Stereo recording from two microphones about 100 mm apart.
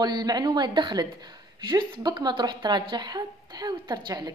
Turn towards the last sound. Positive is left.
turn(degrees=-45)  # may be behind; listen again after turning